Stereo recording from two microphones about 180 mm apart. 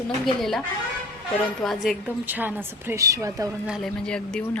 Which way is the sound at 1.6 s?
Centre (ahead or behind).